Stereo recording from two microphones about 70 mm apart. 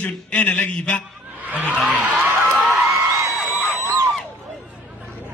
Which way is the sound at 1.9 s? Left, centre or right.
Centre.